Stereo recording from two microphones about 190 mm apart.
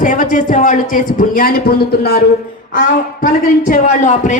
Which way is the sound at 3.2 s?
40° left (ahead or behind).